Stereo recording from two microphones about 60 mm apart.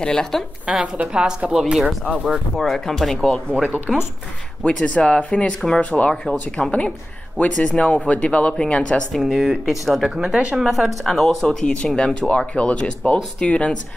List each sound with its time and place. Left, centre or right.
0.0 s speech: centre
0.7 s speech: centre
2.5 s speech: centre
3.6 s speech: right
4.6 s speech: left
6.2 s speech: centre
7.3 s speech: left
9.1 s speech: centre
10.1 s speech: centre
10.6 s speech: centre